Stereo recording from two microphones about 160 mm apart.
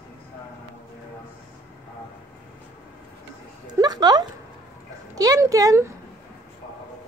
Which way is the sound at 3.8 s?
25° right (ahead or behind).